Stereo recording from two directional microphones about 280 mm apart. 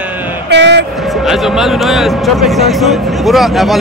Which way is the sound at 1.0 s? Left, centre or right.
Centre.